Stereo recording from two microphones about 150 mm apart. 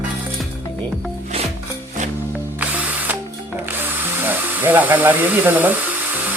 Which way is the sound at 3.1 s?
10° right (ahead or behind).